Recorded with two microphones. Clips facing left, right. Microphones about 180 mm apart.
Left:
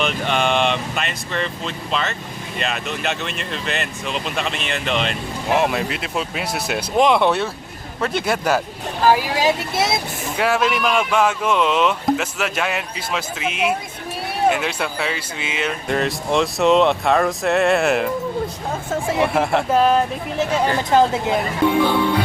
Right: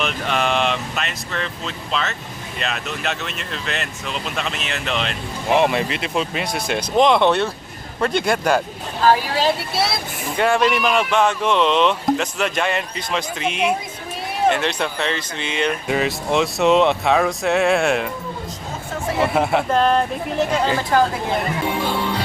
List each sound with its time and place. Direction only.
0.0 s speech: centre (ahead or behind); by 9.9 s 15° left (ahead or behind)
10.3 s speech: 5° left (ahead or behind)
19.2 s speech: centre (ahead or behind)
20.9 s speech: 20° left (ahead or behind)